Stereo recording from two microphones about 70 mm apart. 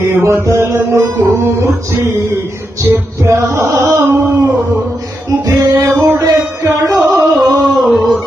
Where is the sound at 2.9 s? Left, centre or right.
Right.